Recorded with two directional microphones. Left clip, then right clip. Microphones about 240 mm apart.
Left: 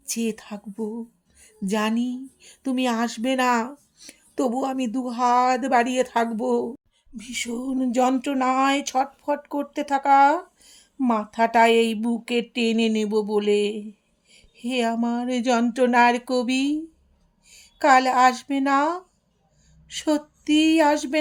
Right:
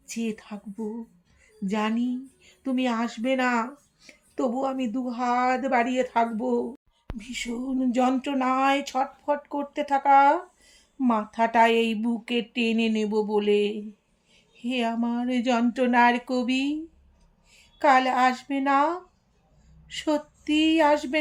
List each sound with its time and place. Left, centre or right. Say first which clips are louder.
0.0 s speech: left 4 dB; left
7.2 s speech: left 3 dB; left